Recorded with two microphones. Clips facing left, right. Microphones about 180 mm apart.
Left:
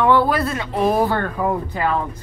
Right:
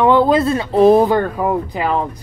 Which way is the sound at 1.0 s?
15° right (ahead or behind).